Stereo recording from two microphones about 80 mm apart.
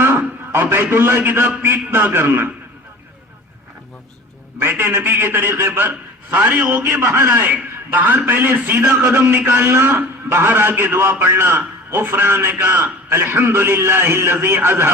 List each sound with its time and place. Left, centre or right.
0.0 s a man's voice: right
4.6 s a man's voice: right